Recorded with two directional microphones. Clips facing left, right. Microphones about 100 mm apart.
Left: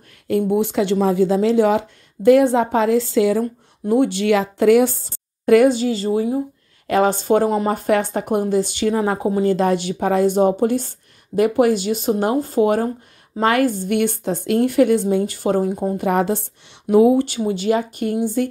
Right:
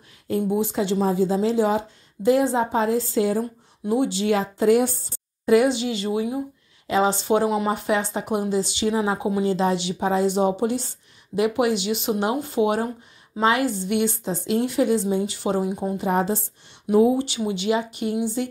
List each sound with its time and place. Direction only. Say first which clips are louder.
0.3 s speech: left 5 dB; 65° left (ahead or behind); by 3.4 s 85° left
3.8 s a woman's voice: left 5 dB; 55° left (ahead or behind); by 6.4 s 35° left (ahead or behind)
6.9 s speech: left 4 dB; 50° left (ahead or behind)
16.1 s a woman's voice: left 3 dB; 65° left (ahead or behind)
17.2 s speech: left 5 dB; 45° left (ahead or behind)